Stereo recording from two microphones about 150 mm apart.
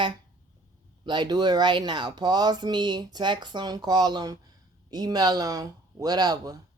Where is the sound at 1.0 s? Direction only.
30° right (ahead or behind).